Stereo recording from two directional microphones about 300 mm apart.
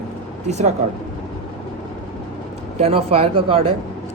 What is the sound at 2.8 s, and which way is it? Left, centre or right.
Speech, centre.